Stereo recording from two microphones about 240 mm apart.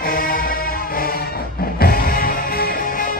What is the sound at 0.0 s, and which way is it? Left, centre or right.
Music, left.